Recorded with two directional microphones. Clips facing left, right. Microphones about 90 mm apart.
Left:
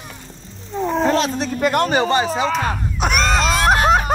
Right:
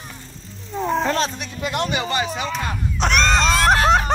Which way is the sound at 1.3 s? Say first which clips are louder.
Left 7 dB; 45° left (ahead or behind).